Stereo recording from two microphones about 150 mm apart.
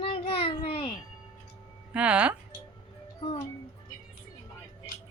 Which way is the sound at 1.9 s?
10° right (ahead or behind).